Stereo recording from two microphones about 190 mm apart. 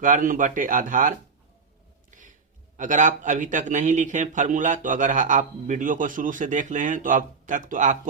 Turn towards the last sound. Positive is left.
turn(degrees=-40)  # may be behind; listen again after turning